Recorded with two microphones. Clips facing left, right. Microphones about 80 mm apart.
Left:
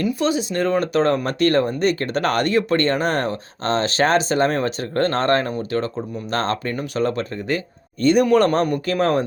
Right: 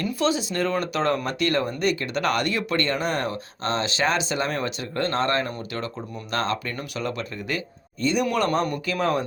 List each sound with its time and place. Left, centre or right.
0.2 s speech: left